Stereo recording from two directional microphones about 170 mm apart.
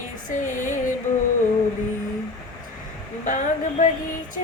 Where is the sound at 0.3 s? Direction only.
50° left (ahead or behind).